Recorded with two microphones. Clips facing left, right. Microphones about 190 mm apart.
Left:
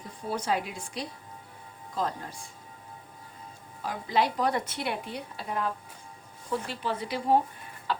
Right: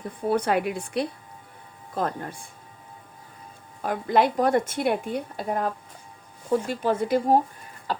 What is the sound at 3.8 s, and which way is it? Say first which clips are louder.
A woman's voice: right 6 dB; 55° right (ahead or behind).